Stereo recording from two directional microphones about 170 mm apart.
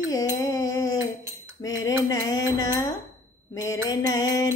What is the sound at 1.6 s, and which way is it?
Mantra, 20° left (ahead or behind).